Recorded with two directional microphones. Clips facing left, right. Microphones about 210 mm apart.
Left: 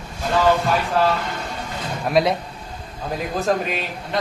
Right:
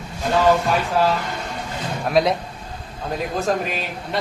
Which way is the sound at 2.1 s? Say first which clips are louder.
Even; centre (ahead or behind).